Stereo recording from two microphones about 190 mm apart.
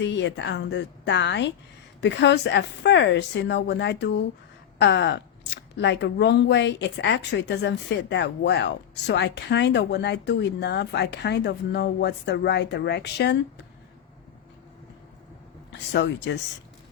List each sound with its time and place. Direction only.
0.0 s a woman's voice: 70° left (ahead or behind)
15.9 s speech: 65° left (ahead or behind)